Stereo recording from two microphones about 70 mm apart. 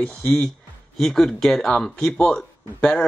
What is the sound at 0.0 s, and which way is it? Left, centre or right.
Speech, centre.